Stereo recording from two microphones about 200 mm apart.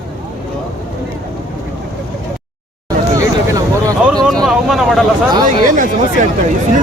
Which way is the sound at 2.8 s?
15° right (ahead or behind).